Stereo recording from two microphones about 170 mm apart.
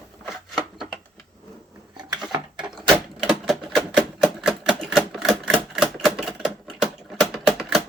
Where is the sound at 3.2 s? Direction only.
Centre (ahead or behind).